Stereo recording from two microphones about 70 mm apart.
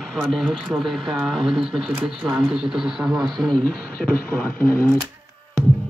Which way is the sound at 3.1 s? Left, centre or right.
Right.